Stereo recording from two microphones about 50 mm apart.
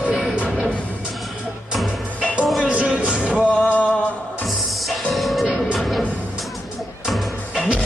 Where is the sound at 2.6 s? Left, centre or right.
Right.